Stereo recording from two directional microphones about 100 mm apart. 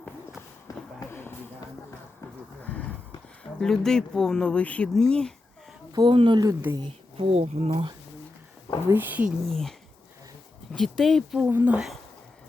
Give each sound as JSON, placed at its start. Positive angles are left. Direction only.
{"t": 0.9, "sound": "a sound", "side_deg": 20}
{"t": 3.6, "sound": "speech", "side_deg": 5}
{"t": 5.9, "sound": "speech", "side_deg": -50}
{"t": 6.8, "sound": "speech", "side_deg": -70}
{"t": 8.9, "sound": "speech", "side_deg": -20}
{"t": 9.5, "sound": "speech", "side_deg": 5}
{"t": 10.8, "sound": "speech", "side_deg": 5}
{"t": 11.4, "sound": "speech", "side_deg": -20}